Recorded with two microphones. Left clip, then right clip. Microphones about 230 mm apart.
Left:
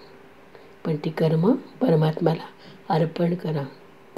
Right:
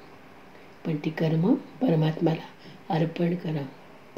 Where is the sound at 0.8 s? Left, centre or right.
Left.